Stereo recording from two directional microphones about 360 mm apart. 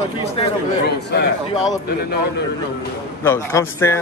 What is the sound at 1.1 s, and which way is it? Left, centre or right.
Speech, left.